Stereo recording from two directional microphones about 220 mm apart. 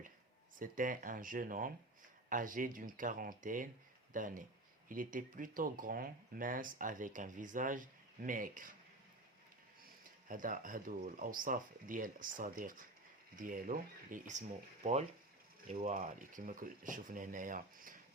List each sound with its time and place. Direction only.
0.6 s speech: 40° right (ahead or behind)
10.2 s speech: 35° right (ahead or behind)